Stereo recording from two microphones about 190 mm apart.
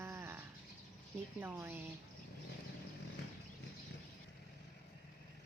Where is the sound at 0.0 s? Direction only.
15° right (ahead or behind).